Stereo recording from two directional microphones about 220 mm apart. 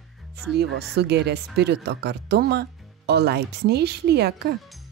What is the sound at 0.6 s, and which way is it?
Speech, 50° right (ahead or behind).